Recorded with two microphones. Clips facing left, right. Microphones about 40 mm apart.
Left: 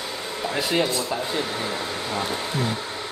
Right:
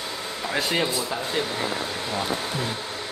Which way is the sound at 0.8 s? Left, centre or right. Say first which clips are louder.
Left 2 dB; centre.